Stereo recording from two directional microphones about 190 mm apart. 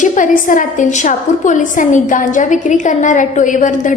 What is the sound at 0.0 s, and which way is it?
A woman's voice, 45° left (ahead or behind).